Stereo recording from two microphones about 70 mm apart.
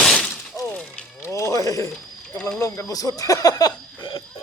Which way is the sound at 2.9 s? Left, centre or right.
Left.